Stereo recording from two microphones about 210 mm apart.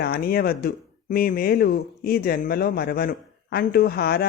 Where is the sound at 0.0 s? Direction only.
45° left (ahead or behind).